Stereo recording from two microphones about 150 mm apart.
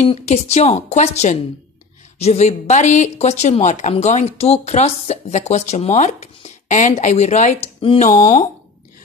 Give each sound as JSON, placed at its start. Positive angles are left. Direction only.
{"t": 0.0, "sound": "speech", "side_deg": 45}